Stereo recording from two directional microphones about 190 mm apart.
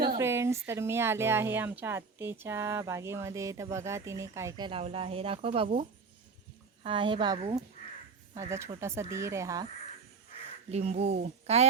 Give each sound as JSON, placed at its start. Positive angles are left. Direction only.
{"t": 0.2, "sound": "speech", "side_deg": -15}
{"t": 6.8, "sound": "a woman's voice", "side_deg": -25}
{"t": 10.7, "sound": "speech", "side_deg": -35}